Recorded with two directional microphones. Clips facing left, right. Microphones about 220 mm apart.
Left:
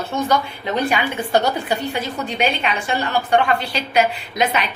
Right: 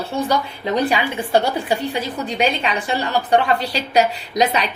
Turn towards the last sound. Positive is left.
turn(degrees=-35)  # may be behind; listen again after turning